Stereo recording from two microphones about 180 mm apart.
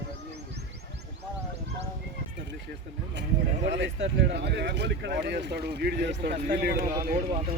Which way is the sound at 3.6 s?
70° right (ahead or behind).